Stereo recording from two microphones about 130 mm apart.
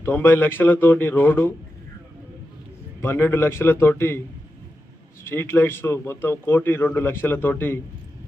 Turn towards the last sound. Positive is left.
turn(degrees=15)  # may be behind; listen again after turning